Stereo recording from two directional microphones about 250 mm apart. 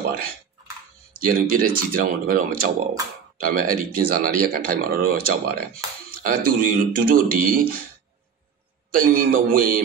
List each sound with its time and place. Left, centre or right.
1.2 s speech: right
8.9 s speech: right